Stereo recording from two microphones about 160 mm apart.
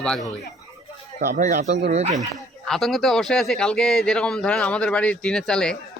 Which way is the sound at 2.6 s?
Centre (ahead or behind).